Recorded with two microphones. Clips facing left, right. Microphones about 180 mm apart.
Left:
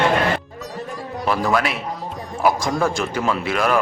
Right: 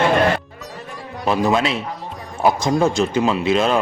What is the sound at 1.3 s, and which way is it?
Speech, 20° right (ahead or behind).